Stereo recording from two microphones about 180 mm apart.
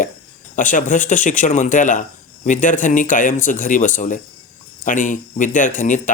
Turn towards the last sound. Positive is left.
turn(degrees=45)  # may be behind; listen again after turning